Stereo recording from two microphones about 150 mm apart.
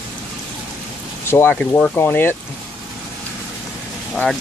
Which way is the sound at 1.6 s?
5° left (ahead or behind).